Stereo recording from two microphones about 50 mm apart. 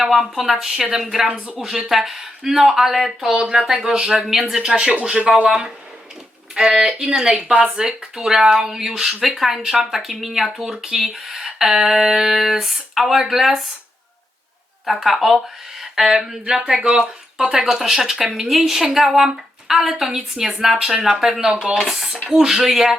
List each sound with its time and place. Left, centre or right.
0.0 s speech: centre
14.8 s speech: centre